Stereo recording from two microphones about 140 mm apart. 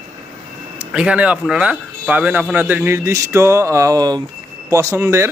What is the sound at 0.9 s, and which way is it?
A man's voice, 5° right (ahead or behind).